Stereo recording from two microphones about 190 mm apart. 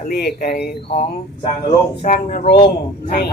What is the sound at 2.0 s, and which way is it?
Speech, 50° left (ahead or behind).